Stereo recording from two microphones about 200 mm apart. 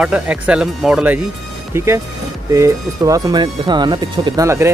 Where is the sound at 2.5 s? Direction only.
15° right (ahead or behind).